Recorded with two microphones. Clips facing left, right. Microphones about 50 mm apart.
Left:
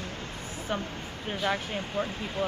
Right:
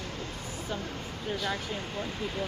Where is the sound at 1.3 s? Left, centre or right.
Left.